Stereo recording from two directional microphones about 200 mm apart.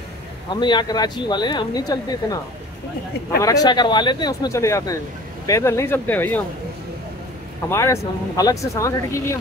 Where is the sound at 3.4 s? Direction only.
15° left (ahead or behind).